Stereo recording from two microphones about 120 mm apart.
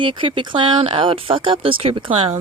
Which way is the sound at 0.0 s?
45° right (ahead or behind).